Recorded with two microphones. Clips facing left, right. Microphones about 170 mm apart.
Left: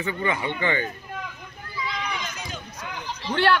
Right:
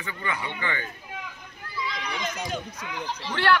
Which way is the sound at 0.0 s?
25° left (ahead or behind).